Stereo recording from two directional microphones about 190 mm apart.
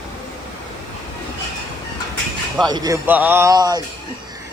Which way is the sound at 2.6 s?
20° right (ahead or behind).